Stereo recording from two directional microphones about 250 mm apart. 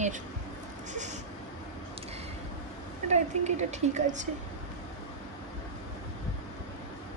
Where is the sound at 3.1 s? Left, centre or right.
Right.